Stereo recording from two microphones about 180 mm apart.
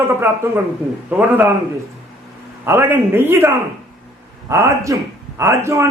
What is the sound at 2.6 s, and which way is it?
A man's voice, 10° right (ahead or behind).